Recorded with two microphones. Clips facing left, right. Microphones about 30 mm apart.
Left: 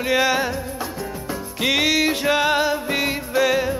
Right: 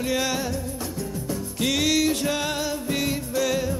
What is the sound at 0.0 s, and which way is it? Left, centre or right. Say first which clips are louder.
Music: left 6 dB; left.